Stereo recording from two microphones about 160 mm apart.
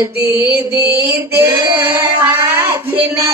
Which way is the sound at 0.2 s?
85° right.